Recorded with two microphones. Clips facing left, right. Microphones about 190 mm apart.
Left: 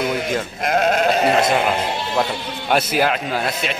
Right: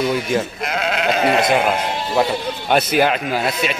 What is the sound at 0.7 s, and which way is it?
Goat, 45° left (ahead or behind).